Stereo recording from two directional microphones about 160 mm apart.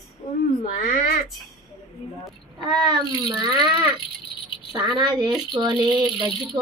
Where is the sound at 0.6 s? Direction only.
60° left (ahead or behind).